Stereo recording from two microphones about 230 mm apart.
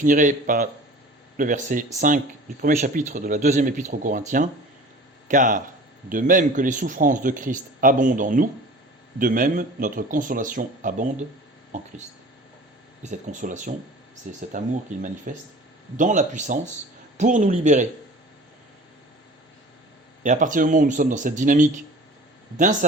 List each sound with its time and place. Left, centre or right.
0.0 s speech: right
13.0 s speech: right
20.2 s speech: right